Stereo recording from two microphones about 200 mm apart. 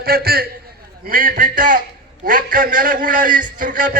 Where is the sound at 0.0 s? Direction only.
50° right (ahead or behind).